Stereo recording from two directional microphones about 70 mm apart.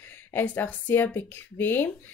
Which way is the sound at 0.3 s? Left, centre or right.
Left.